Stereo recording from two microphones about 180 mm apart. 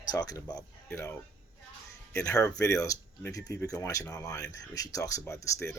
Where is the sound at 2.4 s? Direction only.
15° left (ahead or behind).